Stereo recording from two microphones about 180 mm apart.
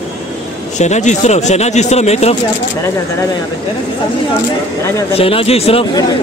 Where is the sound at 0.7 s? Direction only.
40° left (ahead or behind).